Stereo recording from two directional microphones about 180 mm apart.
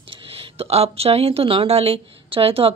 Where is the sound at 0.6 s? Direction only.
35° right (ahead or behind).